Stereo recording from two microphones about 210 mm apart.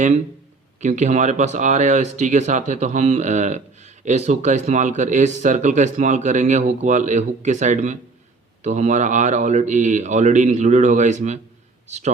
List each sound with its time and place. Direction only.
0.8 s a man's voice: 35° right (ahead or behind)